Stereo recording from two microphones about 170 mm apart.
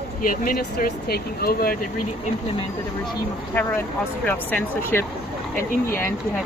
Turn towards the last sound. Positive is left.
turn(degrees=15)  # may be behind; listen again after turning